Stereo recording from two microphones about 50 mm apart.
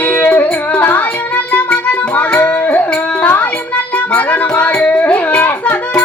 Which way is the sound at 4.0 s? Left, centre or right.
Left.